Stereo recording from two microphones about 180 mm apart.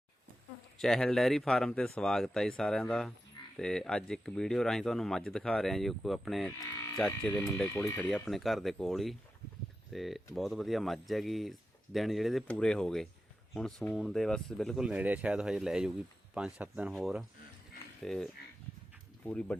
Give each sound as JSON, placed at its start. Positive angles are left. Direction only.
{"t": 0.8, "sound": "speech", "side_deg": 0}
{"t": 7.9, "sound": "speech", "side_deg": 5}